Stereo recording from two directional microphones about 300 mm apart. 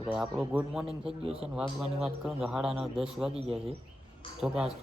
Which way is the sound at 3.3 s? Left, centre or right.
Centre.